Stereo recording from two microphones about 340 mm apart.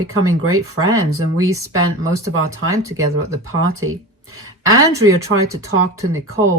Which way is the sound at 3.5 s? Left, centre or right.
Right.